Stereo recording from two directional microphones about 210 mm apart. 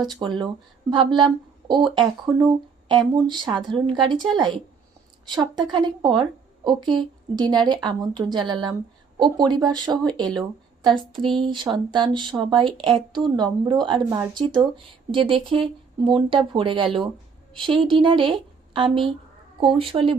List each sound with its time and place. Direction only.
0.2 s a woman's voice: 20° right (ahead or behind)
11.4 s a woman's voice: 20° right (ahead or behind)